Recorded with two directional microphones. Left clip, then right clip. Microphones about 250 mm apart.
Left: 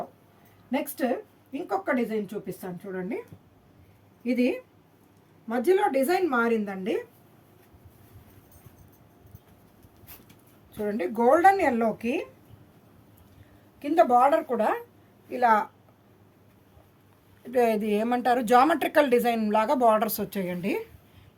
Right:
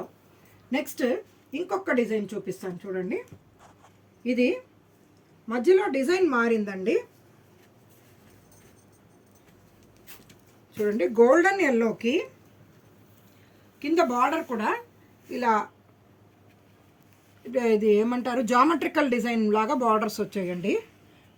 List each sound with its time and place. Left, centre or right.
1.7 s a woman's voice: centre
4.2 s a woman's voice: centre
10.8 s speech: left
13.7 s a woman's voice: left
17.5 s a woman's voice: left